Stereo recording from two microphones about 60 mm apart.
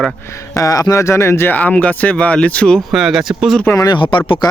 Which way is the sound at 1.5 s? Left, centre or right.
Left.